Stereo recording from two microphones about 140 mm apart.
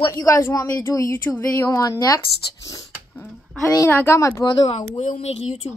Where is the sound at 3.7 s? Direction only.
15° left (ahead or behind).